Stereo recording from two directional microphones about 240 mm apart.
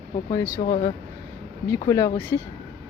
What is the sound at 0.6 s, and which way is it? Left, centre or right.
Speech, left.